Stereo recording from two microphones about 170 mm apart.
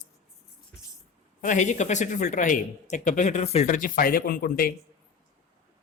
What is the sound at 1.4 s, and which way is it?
Speech, 50° left (ahead or behind).